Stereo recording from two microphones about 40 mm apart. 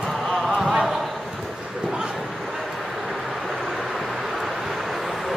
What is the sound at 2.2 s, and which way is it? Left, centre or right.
Vehicle, centre.